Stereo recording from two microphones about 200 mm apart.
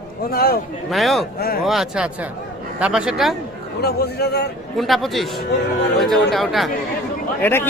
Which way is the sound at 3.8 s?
55° left (ahead or behind).